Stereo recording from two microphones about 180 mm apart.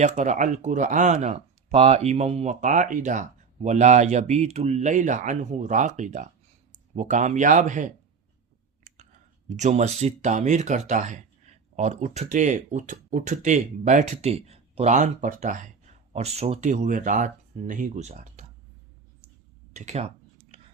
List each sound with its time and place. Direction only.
0.0 s speech: 40° right (ahead or behind)
9.5 s speech: 40° right (ahead or behind)
19.7 s speech: 40° right (ahead or behind)
20.5 s whispering: 30° right (ahead or behind)